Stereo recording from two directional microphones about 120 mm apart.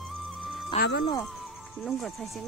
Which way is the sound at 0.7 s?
65° left (ahead or behind).